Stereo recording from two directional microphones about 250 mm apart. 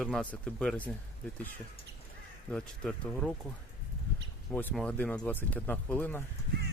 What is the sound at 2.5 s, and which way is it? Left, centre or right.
Speech, centre.